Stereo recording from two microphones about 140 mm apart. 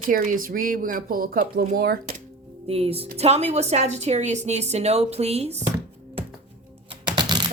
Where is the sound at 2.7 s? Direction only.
45° right (ahead or behind).